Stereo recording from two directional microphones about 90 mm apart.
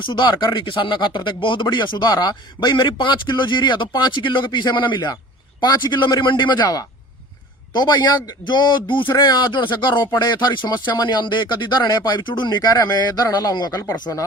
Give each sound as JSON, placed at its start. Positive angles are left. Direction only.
{"t": 0.0, "sound": "a man's voice", "side_deg": 60}
{"t": 1.6, "sound": "a man's voice", "side_deg": 55}
{"t": 9.1, "sound": "a man's voice", "side_deg": 50}
{"t": 10.1, "sound": "speech", "side_deg": 50}